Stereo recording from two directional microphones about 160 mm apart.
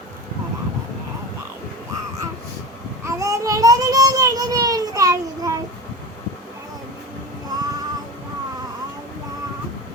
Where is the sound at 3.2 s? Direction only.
20° right (ahead or behind).